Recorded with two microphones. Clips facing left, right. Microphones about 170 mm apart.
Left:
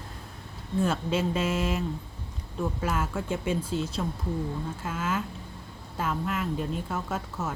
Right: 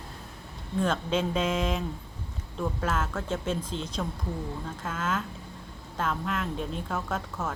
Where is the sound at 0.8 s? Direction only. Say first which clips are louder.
Even; 5° left (ahead or behind).